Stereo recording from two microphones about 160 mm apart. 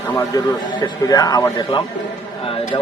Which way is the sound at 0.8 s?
25° left (ahead or behind).